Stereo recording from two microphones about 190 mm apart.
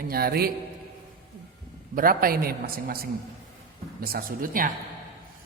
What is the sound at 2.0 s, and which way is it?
A man's voice, 50° right (ahead or behind).